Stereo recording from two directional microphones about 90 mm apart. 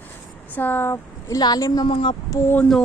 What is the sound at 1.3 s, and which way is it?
Speech, 45° left (ahead or behind).